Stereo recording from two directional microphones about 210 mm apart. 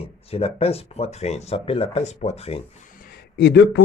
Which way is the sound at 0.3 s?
30° left (ahead or behind).